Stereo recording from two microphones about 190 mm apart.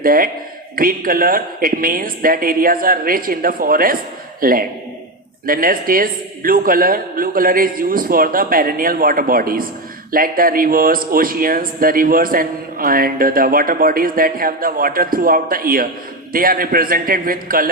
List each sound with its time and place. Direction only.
0.0 s a man's voice: 50° right (ahead or behind)